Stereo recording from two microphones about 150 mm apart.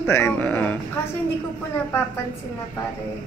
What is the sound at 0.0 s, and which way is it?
Music, 15° left (ahead or behind).